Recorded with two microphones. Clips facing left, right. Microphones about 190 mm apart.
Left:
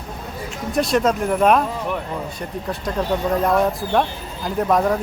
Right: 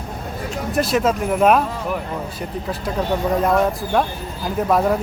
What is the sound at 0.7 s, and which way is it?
Speech, centre (ahead or behind).